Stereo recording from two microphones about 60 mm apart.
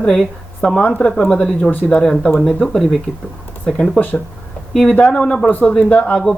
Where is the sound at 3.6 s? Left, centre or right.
Centre.